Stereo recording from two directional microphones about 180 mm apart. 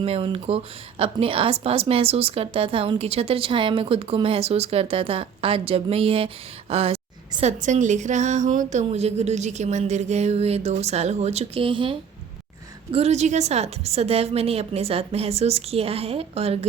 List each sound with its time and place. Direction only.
0.0 s a woman's voice: 30° right (ahead or behind)